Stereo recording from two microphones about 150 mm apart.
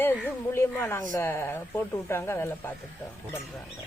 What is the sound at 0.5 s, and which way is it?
Speech, 15° left (ahead or behind).